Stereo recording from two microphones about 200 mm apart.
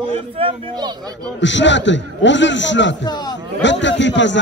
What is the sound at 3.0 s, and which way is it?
Speech, 20° left (ahead or behind).